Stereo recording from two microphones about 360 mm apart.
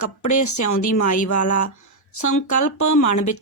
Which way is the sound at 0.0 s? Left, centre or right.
Left.